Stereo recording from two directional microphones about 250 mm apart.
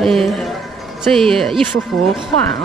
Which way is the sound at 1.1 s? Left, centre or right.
Centre.